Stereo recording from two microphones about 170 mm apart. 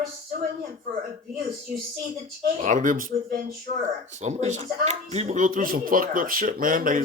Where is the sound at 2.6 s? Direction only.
50° right (ahead or behind).